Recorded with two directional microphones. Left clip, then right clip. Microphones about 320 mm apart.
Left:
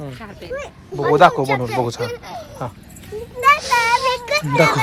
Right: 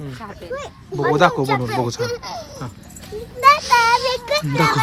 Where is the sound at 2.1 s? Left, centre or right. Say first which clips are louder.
Right 3 dB; right.